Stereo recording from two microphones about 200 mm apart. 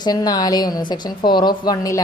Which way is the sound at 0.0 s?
20° left (ahead or behind).